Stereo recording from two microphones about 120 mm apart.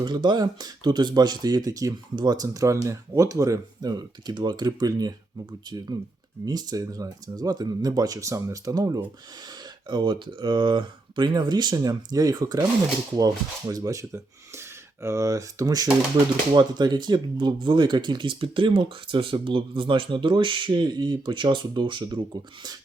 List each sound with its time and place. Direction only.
0.0 s speech: 40° right (ahead or behind)
6.4 s speech: 35° right (ahead or behind)